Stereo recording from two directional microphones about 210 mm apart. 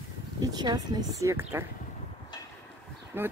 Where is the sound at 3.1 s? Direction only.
10° right (ahead or behind).